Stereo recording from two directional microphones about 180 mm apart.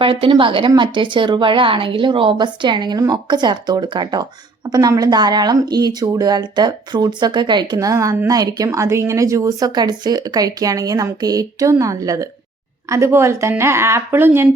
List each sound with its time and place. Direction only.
0.0 s speech: 30° right (ahead or behind); by 14.5 s 10° right (ahead or behind)